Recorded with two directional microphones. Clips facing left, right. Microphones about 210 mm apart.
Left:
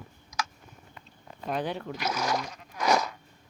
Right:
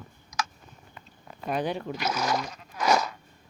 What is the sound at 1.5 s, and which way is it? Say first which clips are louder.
Speech: right 2 dB; 15° right (ahead or behind).